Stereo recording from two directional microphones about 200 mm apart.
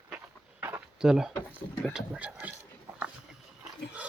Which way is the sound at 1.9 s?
5° right (ahead or behind).